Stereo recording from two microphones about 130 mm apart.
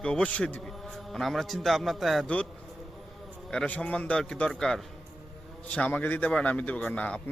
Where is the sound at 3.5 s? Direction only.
10° left (ahead or behind).